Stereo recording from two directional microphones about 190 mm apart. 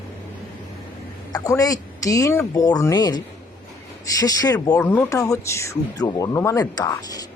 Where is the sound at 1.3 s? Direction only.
20° left (ahead or behind).